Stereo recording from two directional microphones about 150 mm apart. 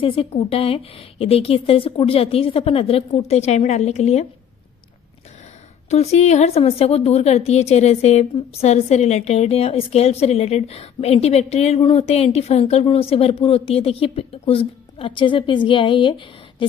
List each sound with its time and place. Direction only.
0.0 s speech: 40° left (ahead or behind)
5.9 s a woman's voice: 45° left (ahead or behind)